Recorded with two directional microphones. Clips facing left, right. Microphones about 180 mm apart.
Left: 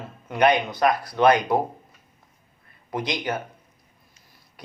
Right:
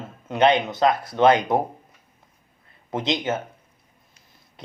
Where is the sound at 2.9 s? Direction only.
25° right (ahead or behind).